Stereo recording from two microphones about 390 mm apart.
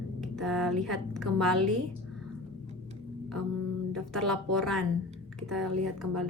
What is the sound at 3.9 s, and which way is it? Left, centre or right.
Speech, centre.